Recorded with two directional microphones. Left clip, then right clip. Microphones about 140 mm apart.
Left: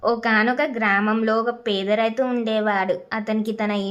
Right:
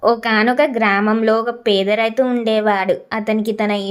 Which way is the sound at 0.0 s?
30° right (ahead or behind).